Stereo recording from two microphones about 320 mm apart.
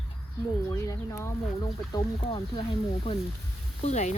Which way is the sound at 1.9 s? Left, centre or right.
Centre.